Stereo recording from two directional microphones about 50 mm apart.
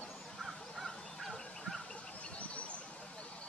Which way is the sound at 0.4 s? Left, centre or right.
Centre.